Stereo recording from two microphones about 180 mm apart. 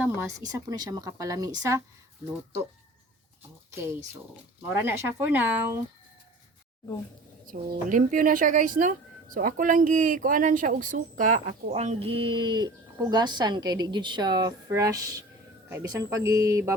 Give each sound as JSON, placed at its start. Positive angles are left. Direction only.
{"t": 0.0, "sound": "speech", "side_deg": -15}
{"t": 3.7, "sound": "speech", "side_deg": -15}
{"t": 7.5, "sound": "speech", "side_deg": -45}